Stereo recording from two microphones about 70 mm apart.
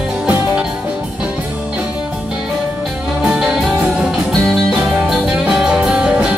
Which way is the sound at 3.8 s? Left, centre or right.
Centre.